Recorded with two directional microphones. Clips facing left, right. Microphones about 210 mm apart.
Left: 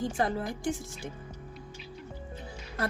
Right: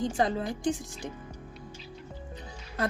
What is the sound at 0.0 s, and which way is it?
A woman's voice, 20° right (ahead or behind).